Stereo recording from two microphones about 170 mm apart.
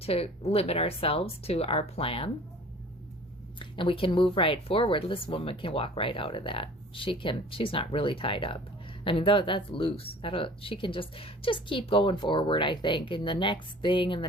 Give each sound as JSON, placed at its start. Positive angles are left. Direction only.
{"t": 0.0, "sound": "speech", "side_deg": 35}
{"t": 3.6, "sound": "speech", "side_deg": 30}